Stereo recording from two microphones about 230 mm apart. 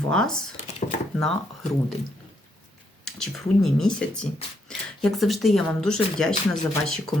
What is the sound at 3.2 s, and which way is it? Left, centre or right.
Speech, centre.